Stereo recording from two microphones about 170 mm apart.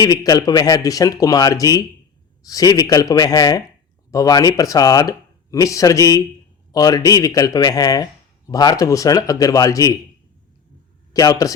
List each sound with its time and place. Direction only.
0.0 s speech: 20° left (ahead or behind)
11.1 s a man's voice: 20° left (ahead or behind)